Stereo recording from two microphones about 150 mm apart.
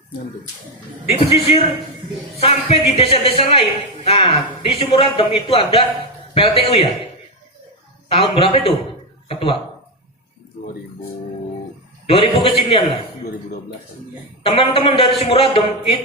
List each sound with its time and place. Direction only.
1.2 s a woman's voice: 40° left (ahead or behind)
8.1 s a woman's voice: 40° left (ahead or behind)
12.0 s a woman's voice: 40° left (ahead or behind)
14.4 s a woman's voice: 40° left (ahead or behind)